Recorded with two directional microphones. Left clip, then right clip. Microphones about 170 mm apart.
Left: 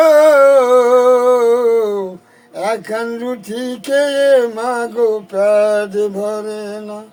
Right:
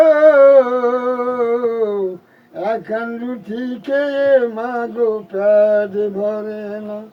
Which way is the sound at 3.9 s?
35° left (ahead or behind).